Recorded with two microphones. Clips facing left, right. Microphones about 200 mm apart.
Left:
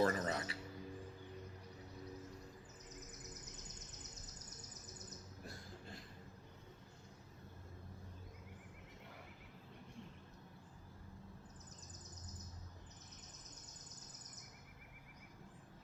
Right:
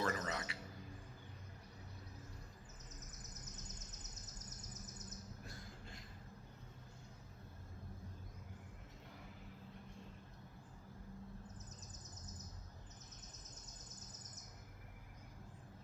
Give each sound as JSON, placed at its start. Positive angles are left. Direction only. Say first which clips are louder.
{"t": 0.0, "sound": "music", "louder": "left 5 dB", "side_deg": 35}